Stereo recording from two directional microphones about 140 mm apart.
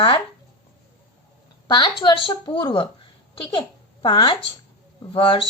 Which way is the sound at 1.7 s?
35° left (ahead or behind).